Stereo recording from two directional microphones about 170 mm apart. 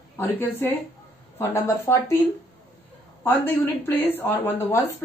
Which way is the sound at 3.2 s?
10° left (ahead or behind).